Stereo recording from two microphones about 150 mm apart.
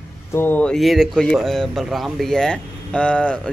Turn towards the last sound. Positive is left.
turn(degrees=5)  # may be behind; listen again after turning